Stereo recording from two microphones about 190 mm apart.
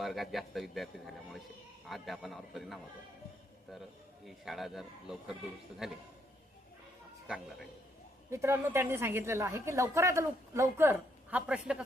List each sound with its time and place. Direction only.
0.0 s a man's voice: centre (ahead or behind)
4.3 s a man's voice: centre (ahead or behind)
8.3 s a woman's voice: 15° right (ahead or behind)